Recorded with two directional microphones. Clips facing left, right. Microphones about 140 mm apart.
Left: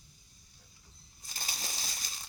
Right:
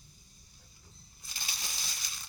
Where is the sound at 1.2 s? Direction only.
40° left (ahead or behind).